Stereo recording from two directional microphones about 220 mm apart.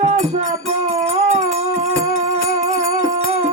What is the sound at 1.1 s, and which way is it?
Howl, 30° right (ahead or behind).